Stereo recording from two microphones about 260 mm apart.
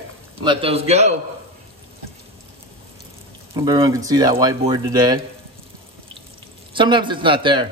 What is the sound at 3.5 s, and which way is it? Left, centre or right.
Speech, centre.